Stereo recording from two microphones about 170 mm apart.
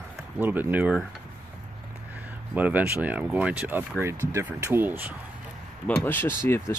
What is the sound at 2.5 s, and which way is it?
Speech, 10° right (ahead or behind).